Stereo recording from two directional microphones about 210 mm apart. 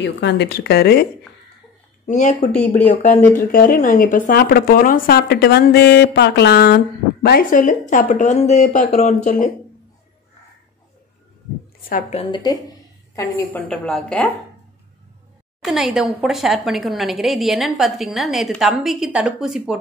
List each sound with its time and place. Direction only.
0.0 s speech: 55° left (ahead or behind)
2.0 s speech: 35° left (ahead or behind)
11.9 s a woman's voice: 30° left (ahead or behind); by 14.3 s 5° left (ahead or behind)
15.6 s a woman's voice: centre (ahead or behind)